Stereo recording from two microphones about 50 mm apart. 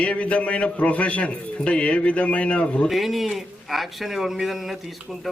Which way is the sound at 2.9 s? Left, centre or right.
Centre.